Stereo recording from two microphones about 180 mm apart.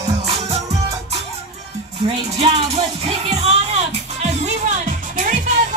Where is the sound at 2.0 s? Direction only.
30° right (ahead or behind).